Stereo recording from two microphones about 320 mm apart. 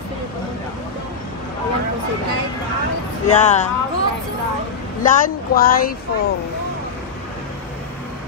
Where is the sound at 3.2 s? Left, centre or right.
Left.